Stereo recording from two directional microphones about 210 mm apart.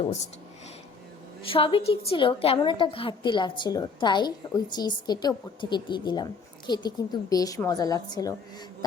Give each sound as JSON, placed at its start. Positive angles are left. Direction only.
{"t": 1.5, "sound": "a woman's voice", "side_deg": 25}